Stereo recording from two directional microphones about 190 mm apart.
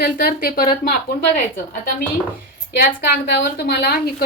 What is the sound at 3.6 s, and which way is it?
Speech, 55° left (ahead or behind).